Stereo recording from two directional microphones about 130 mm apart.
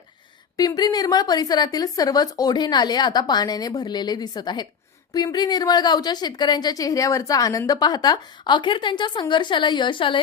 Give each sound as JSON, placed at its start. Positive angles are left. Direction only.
{"t": 0.5, "sound": "a woman's voice", "side_deg": 30}